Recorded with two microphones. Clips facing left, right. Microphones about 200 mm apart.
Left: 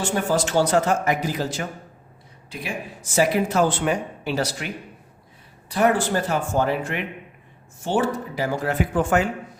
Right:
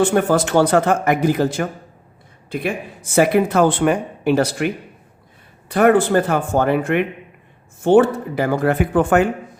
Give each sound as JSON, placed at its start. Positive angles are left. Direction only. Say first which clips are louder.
{"t": 0.0, "sound": "speech", "louder": "right 7 dB", "side_deg": -60}